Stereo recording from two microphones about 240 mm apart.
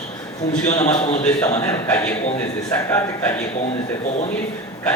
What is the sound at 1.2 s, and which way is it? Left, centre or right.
A man's voice, centre.